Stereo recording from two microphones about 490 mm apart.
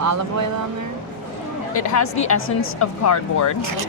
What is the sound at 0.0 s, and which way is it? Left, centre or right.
Speech, right.